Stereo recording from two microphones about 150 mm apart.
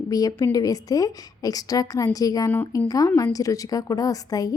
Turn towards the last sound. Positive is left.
turn(degrees=25)  # may be behind; listen again after turning